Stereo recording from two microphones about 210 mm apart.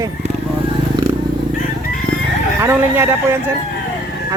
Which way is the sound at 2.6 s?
10° right (ahead or behind).